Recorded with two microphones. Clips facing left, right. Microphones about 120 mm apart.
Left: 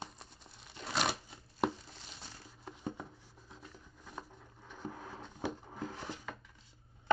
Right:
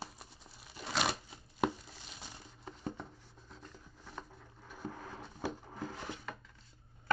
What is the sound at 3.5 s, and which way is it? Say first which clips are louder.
Rub: even; 5° left (ahead or behind).